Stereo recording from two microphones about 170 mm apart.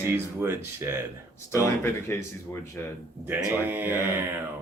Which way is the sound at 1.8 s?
15° left (ahead or behind).